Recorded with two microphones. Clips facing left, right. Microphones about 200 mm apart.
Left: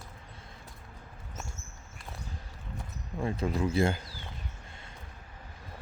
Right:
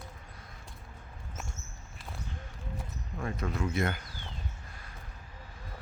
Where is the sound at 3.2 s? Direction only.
30° left (ahead or behind).